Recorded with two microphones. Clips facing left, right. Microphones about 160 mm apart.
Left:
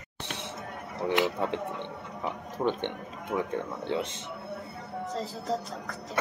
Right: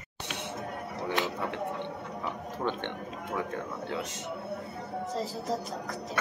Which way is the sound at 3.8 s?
30° left (ahead or behind).